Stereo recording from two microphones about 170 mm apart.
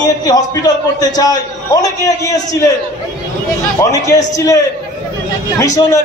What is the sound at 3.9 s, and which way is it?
Speech, 20° left (ahead or behind).